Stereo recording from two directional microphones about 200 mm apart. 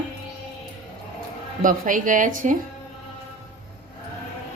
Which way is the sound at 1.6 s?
40° right (ahead or behind).